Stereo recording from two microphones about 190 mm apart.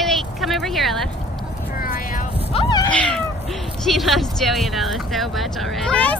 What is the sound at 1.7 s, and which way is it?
Vehicle, 45° left (ahead or behind).